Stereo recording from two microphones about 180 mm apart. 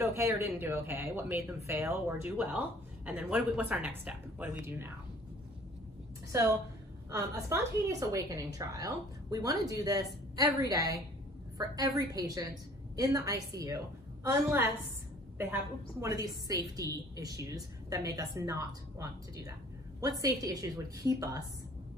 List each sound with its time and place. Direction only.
0.0 s speech: 15° right (ahead or behind)
7.1 s a woman's voice: 15° right (ahead or behind)
15.3 s a woman's voice: 15° right (ahead or behind)